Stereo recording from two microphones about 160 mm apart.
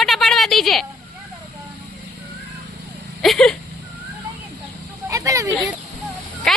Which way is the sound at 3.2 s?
Centre (ahead or behind).